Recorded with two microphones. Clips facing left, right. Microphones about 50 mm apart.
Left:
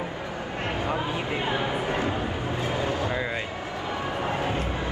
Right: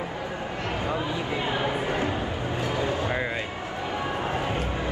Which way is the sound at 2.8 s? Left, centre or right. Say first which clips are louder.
Right 2 dB; right.